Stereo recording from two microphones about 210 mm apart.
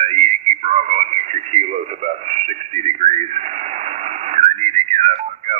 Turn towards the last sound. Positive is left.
turn(degrees=-30)  # may be behind; listen again after turning